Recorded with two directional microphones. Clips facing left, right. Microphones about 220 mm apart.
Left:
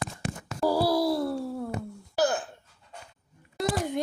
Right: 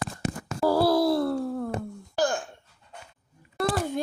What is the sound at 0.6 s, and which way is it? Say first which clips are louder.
Groan: right 3 dB; 10° left (ahead or behind).